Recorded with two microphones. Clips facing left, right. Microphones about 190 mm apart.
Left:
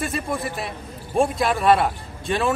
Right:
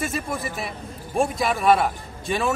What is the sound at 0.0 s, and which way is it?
A man's voice, centre (ahead or behind).